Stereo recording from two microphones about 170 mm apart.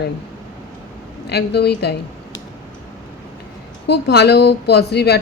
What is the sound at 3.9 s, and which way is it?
A woman's voice, 80° left.